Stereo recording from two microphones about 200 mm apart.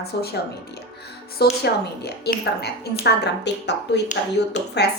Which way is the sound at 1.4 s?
55° left (ahead or behind).